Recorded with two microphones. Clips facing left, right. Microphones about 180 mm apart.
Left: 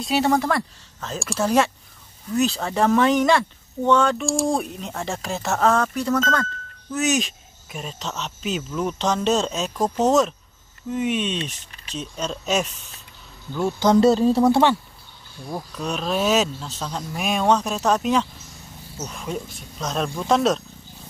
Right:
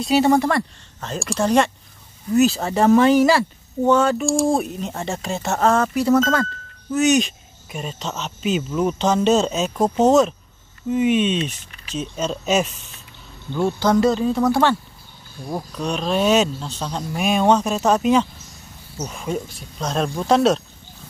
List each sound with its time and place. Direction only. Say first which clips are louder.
0.0 s speech: right 4 dB; centre (ahead or behind)
13.7 s speech: left 1 dB; 15° left (ahead or behind)
13.9 s speech: left 5 dB; 30° left (ahead or behind)
15.7 s speech: right 3 dB; 5° left (ahead or behind)